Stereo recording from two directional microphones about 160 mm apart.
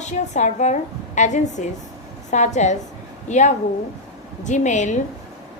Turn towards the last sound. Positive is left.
turn(degrees=50)  # may be behind; listen again after turning